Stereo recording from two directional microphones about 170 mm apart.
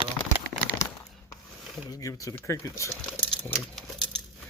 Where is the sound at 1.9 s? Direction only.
20° left (ahead or behind).